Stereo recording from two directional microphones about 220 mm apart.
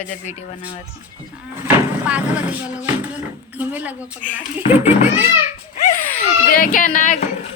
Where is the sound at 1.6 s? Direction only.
5° right (ahead or behind).